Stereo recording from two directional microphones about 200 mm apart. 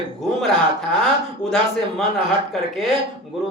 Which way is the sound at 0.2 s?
Centre (ahead or behind).